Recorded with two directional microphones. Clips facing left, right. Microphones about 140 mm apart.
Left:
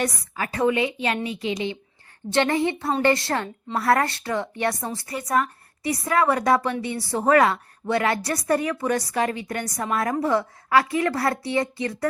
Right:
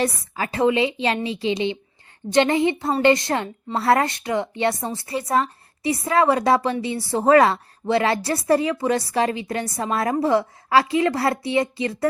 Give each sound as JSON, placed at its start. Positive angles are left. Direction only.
{"t": 0.0, "sound": "a woman's voice", "side_deg": -25}